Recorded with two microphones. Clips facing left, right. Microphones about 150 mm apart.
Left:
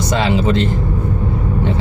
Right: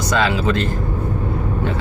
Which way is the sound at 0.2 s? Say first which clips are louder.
Left 2 dB; 25° left (ahead or behind).